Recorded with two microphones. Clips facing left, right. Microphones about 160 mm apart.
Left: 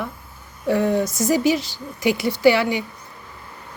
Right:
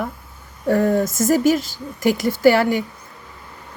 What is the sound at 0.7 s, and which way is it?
Speech, 45° right (ahead or behind).